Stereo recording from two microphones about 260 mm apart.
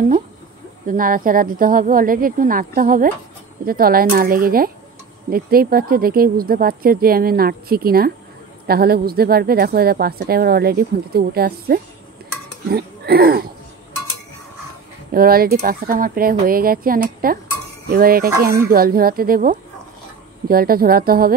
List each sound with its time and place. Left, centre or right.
0.8 s speech: right
15.1 s speech: right